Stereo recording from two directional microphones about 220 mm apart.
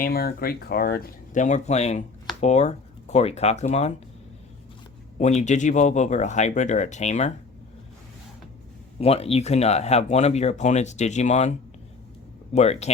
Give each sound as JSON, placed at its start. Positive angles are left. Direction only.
{"t": 0.0, "sound": "speech", "side_deg": 45}
{"t": 5.1, "sound": "speech", "side_deg": 30}
{"t": 9.0, "sound": "speech", "side_deg": 25}
{"t": 12.5, "sound": "speech", "side_deg": 30}